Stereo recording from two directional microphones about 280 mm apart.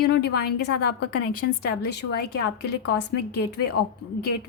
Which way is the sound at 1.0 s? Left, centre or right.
Left.